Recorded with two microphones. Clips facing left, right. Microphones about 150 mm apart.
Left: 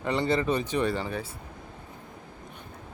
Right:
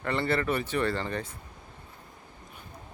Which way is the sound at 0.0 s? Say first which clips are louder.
Left 2 dB; 15° left (ahead or behind).